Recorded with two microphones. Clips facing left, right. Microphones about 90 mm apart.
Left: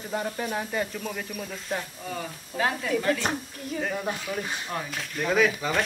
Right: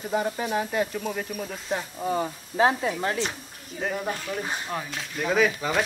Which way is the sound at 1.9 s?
30° right (ahead or behind).